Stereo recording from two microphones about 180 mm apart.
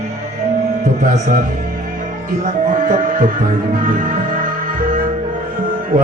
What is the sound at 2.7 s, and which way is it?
Music, 45° right (ahead or behind).